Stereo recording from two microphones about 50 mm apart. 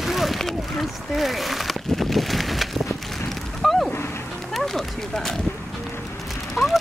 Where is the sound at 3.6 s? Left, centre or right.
Centre.